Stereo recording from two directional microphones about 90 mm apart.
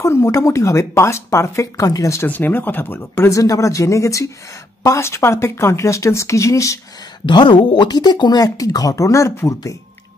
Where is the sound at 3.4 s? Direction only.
40° left (ahead or behind).